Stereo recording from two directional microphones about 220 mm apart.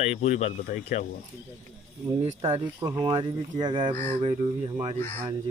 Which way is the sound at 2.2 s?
25° right (ahead or behind).